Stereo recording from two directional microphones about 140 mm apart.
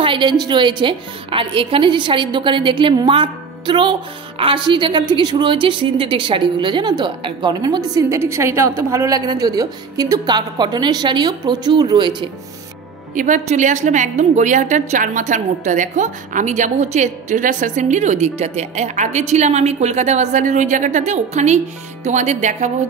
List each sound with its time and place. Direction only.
0.0 s a woman's voice: 35° right (ahead or behind)
13.1 s a woman's voice: 65° right (ahead or behind)